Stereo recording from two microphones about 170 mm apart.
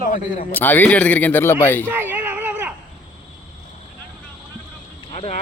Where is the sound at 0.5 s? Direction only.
10° left (ahead or behind).